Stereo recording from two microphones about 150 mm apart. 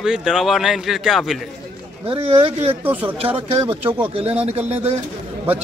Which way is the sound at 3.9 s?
35° right (ahead or behind).